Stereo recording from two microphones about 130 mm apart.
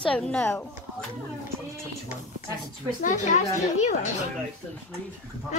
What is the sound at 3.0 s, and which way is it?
Speech, 65° left (ahead or behind).